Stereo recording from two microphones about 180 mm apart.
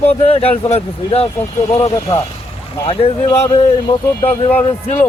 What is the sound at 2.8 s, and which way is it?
Speech, 30° left (ahead or behind).